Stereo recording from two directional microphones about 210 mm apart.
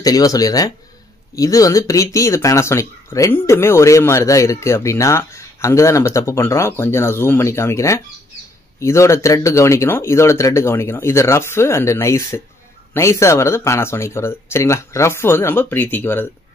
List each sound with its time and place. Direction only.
0.0 s speech: 15° left (ahead or behind)